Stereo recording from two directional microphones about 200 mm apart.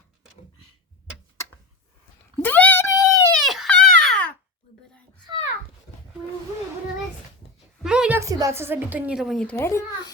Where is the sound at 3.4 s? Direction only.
Centre (ahead or behind).